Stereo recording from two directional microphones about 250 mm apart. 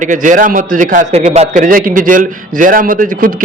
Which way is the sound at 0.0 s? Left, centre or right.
Right.